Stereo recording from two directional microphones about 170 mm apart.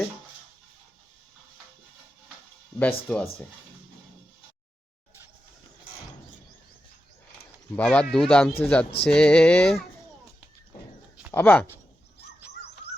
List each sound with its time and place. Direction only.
2.7 s speech: 10° left (ahead or behind)
7.8 s speech: 5° left (ahead or behind)
11.3 s speech: 10° left (ahead or behind)
12.8 s a sound: 35° left (ahead or behind)